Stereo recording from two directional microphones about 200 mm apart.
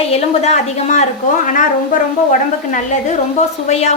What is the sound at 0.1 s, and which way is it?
Speech, 35° left (ahead or behind).